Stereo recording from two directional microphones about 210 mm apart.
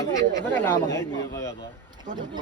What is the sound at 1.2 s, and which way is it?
Speech, 15° left (ahead or behind).